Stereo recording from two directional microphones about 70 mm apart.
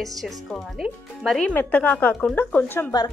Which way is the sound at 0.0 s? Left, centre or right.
Centre.